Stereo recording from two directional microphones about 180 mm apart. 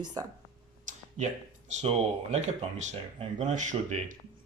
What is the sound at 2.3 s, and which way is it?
Speech, 35° right (ahead or behind).